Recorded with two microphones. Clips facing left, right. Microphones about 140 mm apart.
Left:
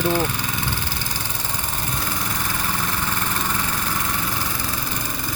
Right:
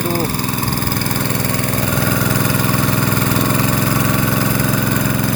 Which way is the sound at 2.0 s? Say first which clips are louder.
Right 11 dB; 90° right.